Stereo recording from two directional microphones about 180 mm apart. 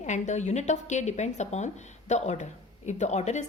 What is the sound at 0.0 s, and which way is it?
A woman's voice, 40° left (ahead or behind).